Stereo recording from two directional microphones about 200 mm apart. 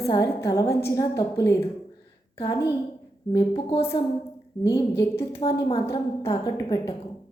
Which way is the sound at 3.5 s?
25° left (ahead or behind).